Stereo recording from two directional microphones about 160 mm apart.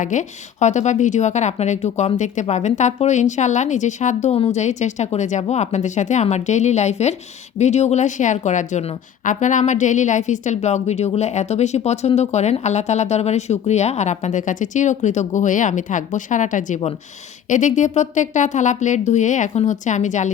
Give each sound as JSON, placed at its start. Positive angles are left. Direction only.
{"t": 0.0, "sound": "a woman's voice", "side_deg": 50}